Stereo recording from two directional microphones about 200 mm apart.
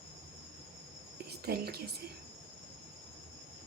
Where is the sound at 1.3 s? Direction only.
50° right (ahead or behind).